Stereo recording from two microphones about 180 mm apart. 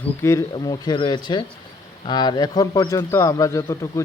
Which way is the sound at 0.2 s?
15° left (ahead or behind).